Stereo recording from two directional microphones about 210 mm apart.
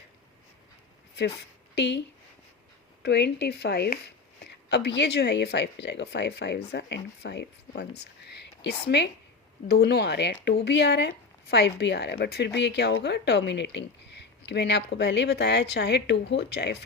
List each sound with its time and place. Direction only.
1.1 s a woman's voice: 50° left (ahead or behind)
3.0 s a woman's voice: 55° left (ahead or behind)